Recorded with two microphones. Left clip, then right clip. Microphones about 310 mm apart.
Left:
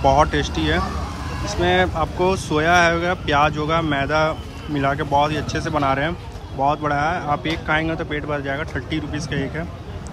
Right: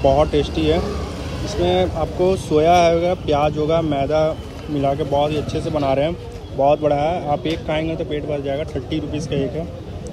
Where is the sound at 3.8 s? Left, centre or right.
Centre.